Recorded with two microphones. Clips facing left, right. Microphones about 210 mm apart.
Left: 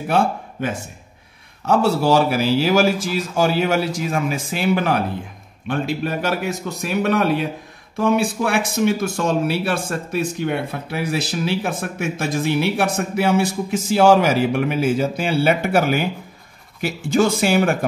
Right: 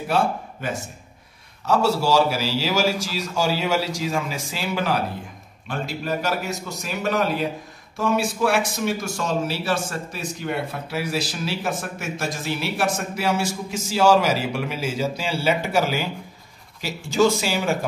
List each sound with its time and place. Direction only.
1.7 s a man's voice: 55° left (ahead or behind)